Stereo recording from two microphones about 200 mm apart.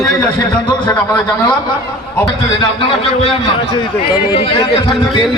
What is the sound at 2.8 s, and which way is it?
A man's voice, 30° left (ahead or behind).